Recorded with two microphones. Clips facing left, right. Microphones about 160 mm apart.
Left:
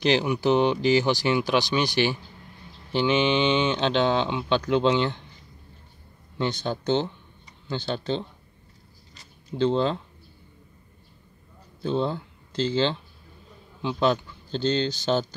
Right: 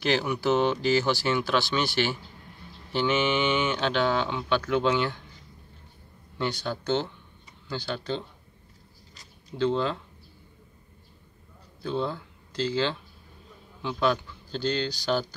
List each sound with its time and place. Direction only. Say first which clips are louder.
0.0 s speech: left 3 dB; 20° left (ahead or behind)
6.3 s speech: left 3 dB; 20° left (ahead or behind)
9.6 s speech: left 3 dB; 30° left (ahead or behind)
11.8 s speech: left 4 dB; 25° left (ahead or behind)